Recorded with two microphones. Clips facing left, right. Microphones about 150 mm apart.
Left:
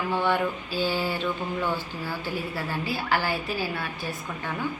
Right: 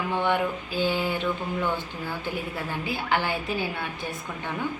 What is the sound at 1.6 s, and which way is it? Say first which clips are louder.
Speech: even; 5° left (ahead or behind).